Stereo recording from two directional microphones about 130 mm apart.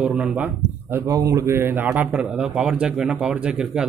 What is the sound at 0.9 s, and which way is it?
Speech, 25° right (ahead or behind).